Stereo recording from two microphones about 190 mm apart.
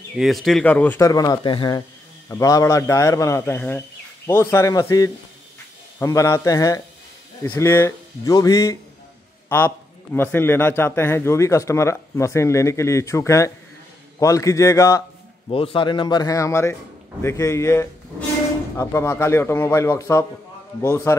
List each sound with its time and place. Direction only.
0.2 s speech: centre (ahead or behind); by 8.7 s 20° left (ahead or behind)
10.1 s speech: 10° left (ahead or behind)
15.5 s a man's voice: 30° left (ahead or behind)